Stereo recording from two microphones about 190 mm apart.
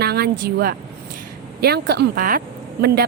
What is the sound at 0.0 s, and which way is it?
A woman's voice, 55° right (ahead or behind).